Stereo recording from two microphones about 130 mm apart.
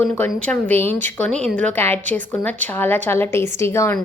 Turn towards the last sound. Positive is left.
turn(degrees=20)  # may be behind; listen again after turning